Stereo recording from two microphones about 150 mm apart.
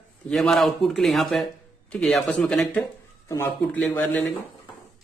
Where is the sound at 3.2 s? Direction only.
15° left (ahead or behind).